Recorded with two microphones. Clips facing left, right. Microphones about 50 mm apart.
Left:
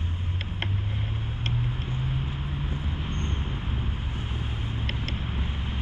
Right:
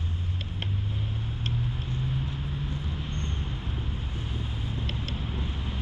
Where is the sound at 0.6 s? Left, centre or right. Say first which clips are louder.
Even; left.